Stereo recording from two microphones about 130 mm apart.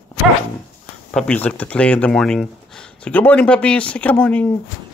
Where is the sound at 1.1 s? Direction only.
Centre (ahead or behind).